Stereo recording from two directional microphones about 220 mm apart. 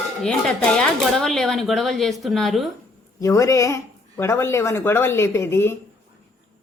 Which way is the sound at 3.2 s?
15° left (ahead or behind).